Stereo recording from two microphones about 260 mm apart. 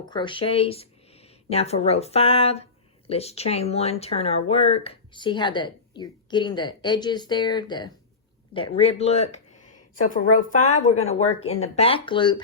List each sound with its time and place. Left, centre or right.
0.0 s speech: centre